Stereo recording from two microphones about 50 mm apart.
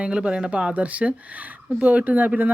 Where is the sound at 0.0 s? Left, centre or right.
Centre.